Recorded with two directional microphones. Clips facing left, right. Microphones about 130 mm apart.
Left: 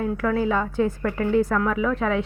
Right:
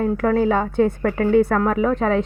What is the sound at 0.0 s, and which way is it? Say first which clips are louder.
A woman's voice: right 5 dB; 45° right (ahead or behind).